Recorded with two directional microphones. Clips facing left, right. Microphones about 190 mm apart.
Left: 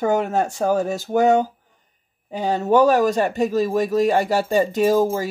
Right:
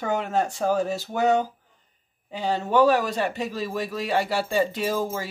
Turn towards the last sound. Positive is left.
turn(degrees=45)  # may be behind; listen again after turning